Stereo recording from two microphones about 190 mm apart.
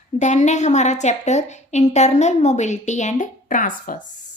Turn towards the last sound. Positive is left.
turn(degrees=45)  # may be behind; listen again after turning